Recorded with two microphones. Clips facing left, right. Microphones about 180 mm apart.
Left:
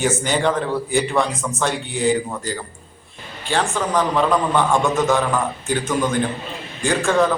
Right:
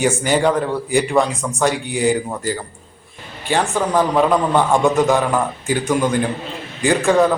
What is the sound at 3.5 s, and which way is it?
A man's voice, 15° right (ahead or behind).